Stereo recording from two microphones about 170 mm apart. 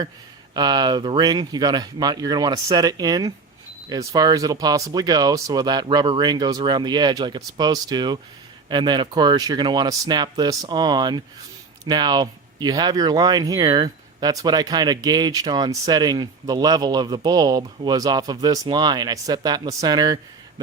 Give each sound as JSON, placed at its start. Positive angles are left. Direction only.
{"t": 0.5, "sound": "speech", "side_deg": -25}